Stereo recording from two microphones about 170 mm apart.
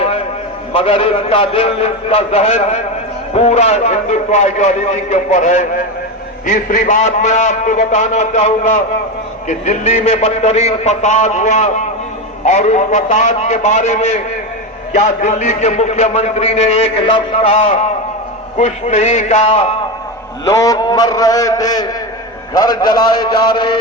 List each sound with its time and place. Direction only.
0.7 s a man's voice: 35° left (ahead or behind)
20.4 s a man's voice: 20° left (ahead or behind)